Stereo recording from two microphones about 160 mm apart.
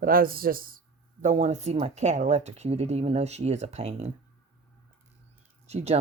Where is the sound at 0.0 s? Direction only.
65° right (ahead or behind).